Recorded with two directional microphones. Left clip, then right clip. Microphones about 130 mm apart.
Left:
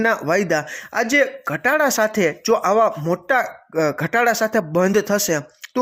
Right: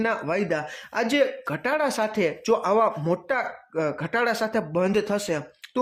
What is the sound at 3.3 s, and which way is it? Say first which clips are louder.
Speech: left 7 dB; 35° left (ahead or behind).